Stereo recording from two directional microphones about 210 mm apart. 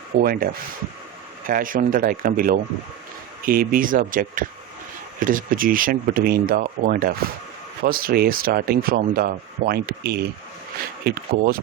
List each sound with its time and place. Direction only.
0.2 s speech: 45° right (ahead or behind)